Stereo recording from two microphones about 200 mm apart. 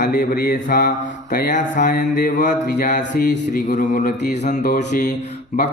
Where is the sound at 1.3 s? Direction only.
40° left (ahead or behind).